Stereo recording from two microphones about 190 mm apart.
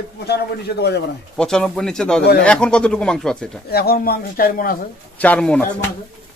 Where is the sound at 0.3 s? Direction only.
60° left (ahead or behind).